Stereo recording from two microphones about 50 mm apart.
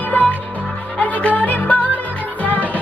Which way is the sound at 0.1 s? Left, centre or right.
Left.